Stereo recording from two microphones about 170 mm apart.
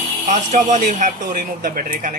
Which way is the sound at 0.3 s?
45° right (ahead or behind).